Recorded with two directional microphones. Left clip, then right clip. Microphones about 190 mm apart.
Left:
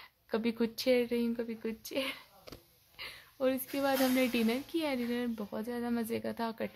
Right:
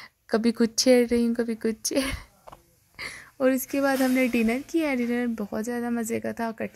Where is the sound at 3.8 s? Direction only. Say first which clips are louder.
Right 6 dB; 20° right (ahead or behind).